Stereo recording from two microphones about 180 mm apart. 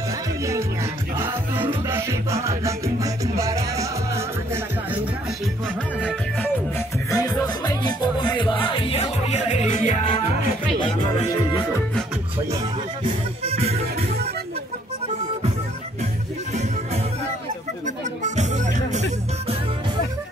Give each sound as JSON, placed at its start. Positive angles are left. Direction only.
{"t": 1.1, "sound": "music", "side_deg": -10}
{"t": 7.1, "sound": "music", "side_deg": 20}
{"t": 13.0, "sound": "music", "side_deg": -35}
{"t": 17.8, "sound": "music", "side_deg": -40}